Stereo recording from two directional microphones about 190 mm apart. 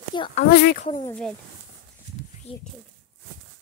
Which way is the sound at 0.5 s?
55° left (ahead or behind).